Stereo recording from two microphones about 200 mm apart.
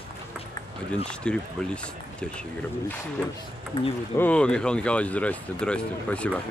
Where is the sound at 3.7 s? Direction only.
25° left (ahead or behind).